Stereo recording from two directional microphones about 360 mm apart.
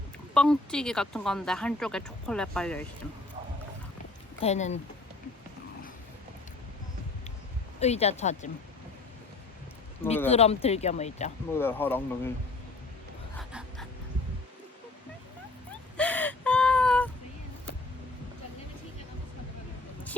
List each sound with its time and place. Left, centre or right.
0.3 s speech: centre
4.4 s speech: centre
7.8 s speech: centre
10.2 s speech: centre
11.5 s speech: centre
13.3 s a sound: centre
16.0 s gasp: centre